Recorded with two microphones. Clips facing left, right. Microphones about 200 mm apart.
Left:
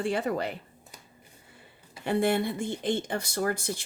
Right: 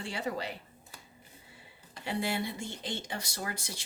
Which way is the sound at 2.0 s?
50° left (ahead or behind).